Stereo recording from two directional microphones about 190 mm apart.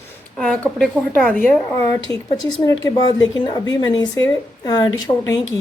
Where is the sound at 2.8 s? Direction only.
20° left (ahead or behind).